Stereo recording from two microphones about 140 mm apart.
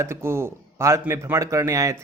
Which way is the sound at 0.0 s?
20° right (ahead or behind).